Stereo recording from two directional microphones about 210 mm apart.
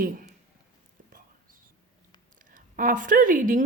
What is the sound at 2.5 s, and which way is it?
A woman's voice, 40° right (ahead or behind).